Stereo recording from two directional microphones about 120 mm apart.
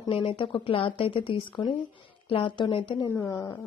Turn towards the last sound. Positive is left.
turn(degrees=15)  # may be behind; listen again after turning